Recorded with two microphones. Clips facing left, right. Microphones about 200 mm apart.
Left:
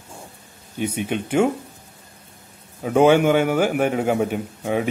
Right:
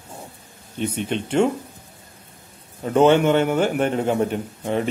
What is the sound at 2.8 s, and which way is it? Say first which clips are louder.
A man's voice: even; 10° left (ahead or behind).